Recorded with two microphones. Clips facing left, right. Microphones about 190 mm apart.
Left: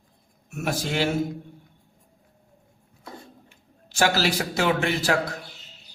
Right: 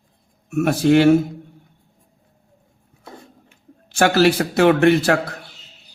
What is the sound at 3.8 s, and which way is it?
A man's voice, 60° right (ahead or behind).